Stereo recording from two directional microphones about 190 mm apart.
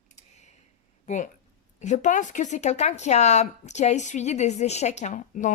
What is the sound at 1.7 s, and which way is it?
Speech, 40° left (ahead or behind).